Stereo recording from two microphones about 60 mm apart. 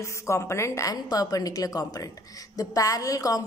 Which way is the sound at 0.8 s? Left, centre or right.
Left.